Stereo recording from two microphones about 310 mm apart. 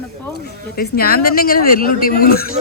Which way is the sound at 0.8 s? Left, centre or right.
Left.